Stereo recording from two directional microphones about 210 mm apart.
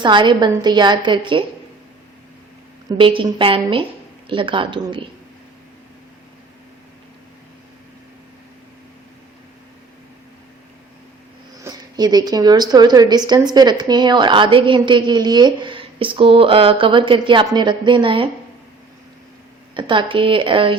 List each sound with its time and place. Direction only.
0.0 s a woman's voice: 20° right (ahead or behind)
2.9 s a woman's voice: 25° right (ahead or behind)
11.6 s a woman's voice: 20° right (ahead or behind)
19.7 s a woman's voice: 25° right (ahead or behind)